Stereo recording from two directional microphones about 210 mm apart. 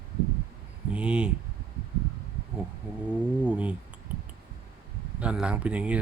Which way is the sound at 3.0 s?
5° right (ahead or behind).